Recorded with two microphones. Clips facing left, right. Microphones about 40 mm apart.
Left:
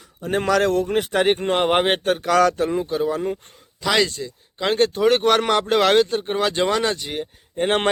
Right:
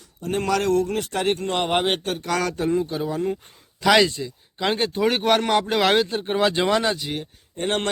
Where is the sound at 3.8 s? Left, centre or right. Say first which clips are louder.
Right 3 dB; centre.